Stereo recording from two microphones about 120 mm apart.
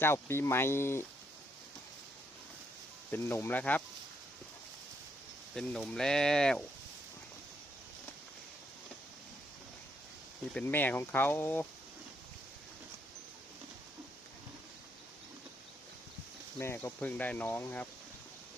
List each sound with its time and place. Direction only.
0.0 s speech: 20° left (ahead or behind)
3.1 s speech: 20° left (ahead or behind)
5.5 s speech: 5° left (ahead or behind)
10.5 s speech: 15° left (ahead or behind)
16.6 s speech: 20° left (ahead or behind)